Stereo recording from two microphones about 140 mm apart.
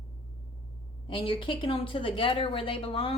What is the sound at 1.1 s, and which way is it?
Speech, 40° left (ahead or behind).